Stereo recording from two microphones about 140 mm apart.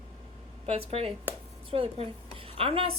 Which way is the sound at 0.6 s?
45° right (ahead or behind).